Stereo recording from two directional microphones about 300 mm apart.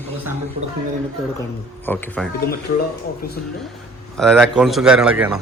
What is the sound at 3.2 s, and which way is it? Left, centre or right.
Speech, left.